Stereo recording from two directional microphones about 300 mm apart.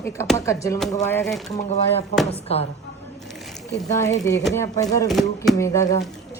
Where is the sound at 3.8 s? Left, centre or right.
Centre.